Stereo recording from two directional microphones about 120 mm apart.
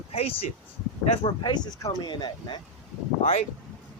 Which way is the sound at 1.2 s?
40° left (ahead or behind).